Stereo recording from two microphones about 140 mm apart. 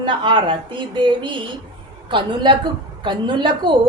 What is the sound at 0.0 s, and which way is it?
Speech, 35° right (ahead or behind).